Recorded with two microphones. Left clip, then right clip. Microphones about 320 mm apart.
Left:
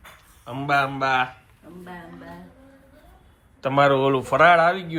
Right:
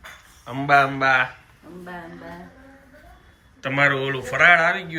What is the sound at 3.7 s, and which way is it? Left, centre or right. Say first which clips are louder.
A man's voice: left 2 dB; centre.